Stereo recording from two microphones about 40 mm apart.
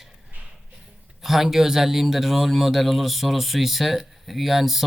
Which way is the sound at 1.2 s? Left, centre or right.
Centre.